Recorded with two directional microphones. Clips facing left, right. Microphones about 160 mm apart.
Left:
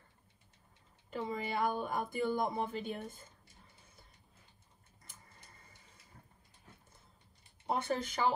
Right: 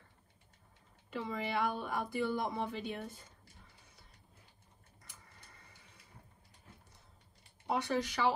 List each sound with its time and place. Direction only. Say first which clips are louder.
1.1 s speech: even; 45° left (ahead or behind)
7.8 s speech: right 1 dB; 50° left (ahead or behind)